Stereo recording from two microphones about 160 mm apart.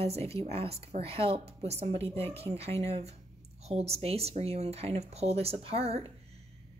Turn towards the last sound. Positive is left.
turn(degrees=-40)  # may be behind; listen again after turning